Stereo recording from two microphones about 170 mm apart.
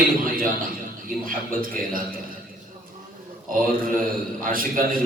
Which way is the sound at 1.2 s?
55° right (ahead or behind).